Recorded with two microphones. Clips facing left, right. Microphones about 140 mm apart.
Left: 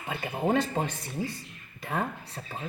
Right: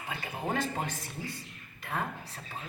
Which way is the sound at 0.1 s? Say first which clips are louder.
Left 7 dB; 25° left (ahead or behind).